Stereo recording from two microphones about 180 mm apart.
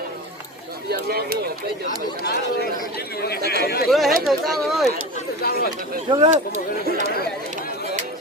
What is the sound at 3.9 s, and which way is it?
Speech, centre (ahead or behind).